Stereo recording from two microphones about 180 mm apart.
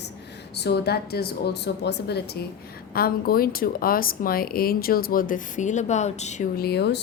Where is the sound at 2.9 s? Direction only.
55° left (ahead or behind); by 6.4 s 40° left (ahead or behind).